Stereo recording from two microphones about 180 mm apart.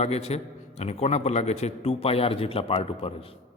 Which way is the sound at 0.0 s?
35° left (ahead or behind).